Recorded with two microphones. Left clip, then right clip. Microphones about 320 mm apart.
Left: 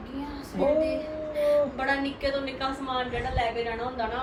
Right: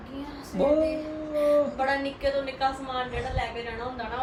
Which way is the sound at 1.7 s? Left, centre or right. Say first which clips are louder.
Right 1 dB; centre.